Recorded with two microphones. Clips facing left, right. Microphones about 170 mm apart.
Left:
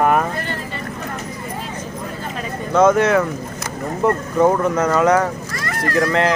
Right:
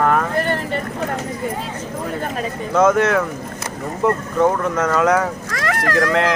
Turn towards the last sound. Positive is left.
turn(degrees=0)  # may be behind; listen again after turning